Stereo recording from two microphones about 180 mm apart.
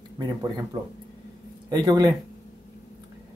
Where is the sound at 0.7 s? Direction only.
20° right (ahead or behind).